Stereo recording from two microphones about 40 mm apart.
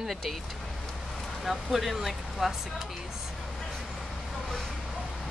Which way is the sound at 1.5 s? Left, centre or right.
Centre.